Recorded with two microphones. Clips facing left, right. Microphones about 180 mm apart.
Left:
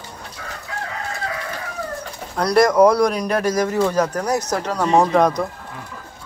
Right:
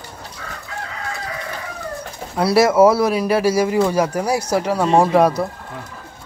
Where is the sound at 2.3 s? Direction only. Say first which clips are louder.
Right 1 dB; 5° right (ahead or behind).